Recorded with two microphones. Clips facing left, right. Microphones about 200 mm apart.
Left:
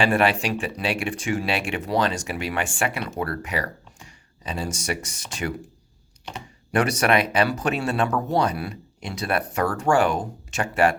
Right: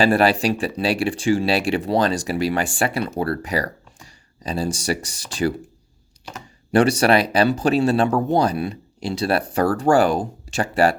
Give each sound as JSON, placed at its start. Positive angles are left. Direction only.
{"t": 0.0, "sound": "speech", "side_deg": -35}
{"t": 6.7, "sound": "speech", "side_deg": -30}